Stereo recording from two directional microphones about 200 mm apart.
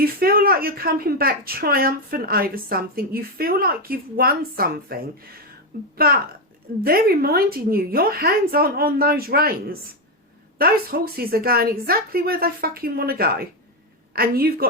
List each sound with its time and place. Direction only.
0.0 s a woman's voice: 50° right (ahead or behind)
6.0 s a woman's voice: 50° right (ahead or behind)